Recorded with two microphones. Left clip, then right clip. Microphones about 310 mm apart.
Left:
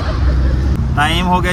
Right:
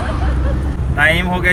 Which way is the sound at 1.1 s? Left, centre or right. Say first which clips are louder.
Left 3 dB; left.